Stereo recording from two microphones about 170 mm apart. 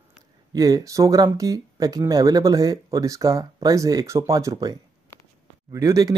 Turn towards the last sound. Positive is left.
turn(degrees=-20)  # may be behind; listen again after turning